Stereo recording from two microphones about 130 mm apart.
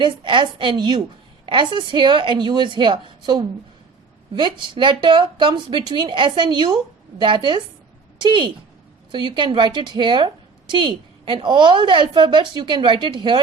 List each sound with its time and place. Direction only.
0.0 s a woman's voice: 40° right (ahead or behind)
4.4 s a woman's voice: 35° right (ahead or behind)